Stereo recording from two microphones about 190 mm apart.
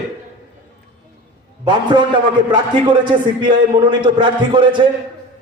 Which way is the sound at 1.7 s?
25° right (ahead or behind).